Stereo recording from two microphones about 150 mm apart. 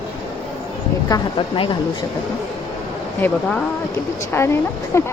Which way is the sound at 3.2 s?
10° left (ahead or behind).